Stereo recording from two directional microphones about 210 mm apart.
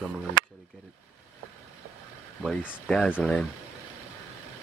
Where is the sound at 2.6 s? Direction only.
Centre (ahead or behind).